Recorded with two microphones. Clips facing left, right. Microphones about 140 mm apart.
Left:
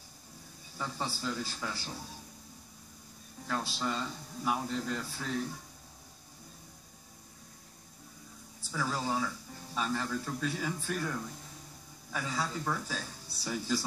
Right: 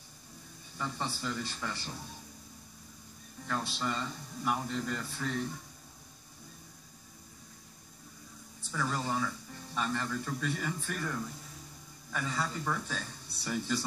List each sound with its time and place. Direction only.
0.7 s a man's voice: 5° left (ahead or behind)
3.4 s a man's voice: 5° left (ahead or behind)
8.7 s a man's voice: 5° left (ahead or behind)